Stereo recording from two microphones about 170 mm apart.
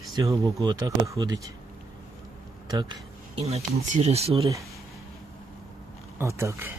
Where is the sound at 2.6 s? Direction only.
25° right (ahead or behind).